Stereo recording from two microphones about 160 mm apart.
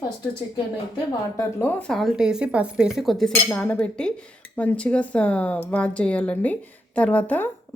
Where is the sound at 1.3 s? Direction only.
15° left (ahead or behind).